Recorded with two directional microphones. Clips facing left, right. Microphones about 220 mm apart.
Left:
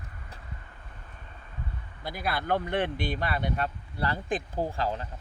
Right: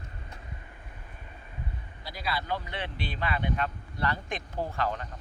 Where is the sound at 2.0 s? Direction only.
55° left (ahead or behind); by 5.1 s 30° left (ahead or behind).